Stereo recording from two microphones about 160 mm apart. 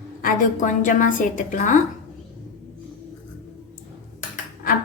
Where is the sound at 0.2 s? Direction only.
55° left (ahead or behind).